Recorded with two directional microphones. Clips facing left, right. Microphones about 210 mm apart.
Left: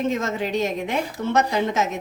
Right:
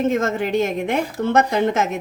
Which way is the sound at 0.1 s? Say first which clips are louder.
Right 4 dB; 50° right (ahead or behind).